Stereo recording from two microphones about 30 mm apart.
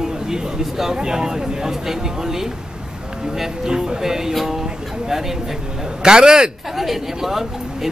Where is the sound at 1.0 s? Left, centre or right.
Right.